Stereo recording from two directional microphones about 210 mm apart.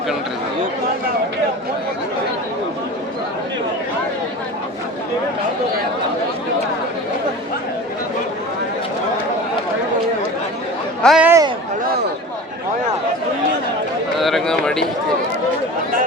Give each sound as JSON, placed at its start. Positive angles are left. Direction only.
{"t": 11.0, "sound": "speech", "side_deg": 0}
{"t": 11.3, "sound": "a sound", "side_deg": -15}
{"t": 14.2, "sound": "speech", "side_deg": 0}